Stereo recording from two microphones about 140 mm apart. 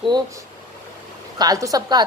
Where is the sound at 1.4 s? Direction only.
25° right (ahead or behind).